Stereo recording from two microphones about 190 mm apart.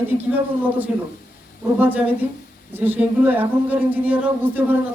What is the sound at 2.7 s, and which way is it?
Speech, 10° right (ahead or behind).